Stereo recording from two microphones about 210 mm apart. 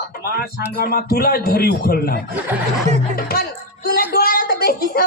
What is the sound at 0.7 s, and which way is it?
Speech, 45° left (ahead or behind).